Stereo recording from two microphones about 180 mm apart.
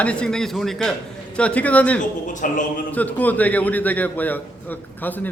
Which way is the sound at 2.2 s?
45° left (ahead or behind).